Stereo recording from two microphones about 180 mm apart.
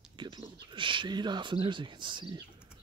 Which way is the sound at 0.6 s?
25° right (ahead or behind).